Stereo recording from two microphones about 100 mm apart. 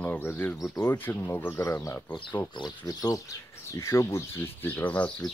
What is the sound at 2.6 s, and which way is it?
Speech, 40° left (ahead or behind).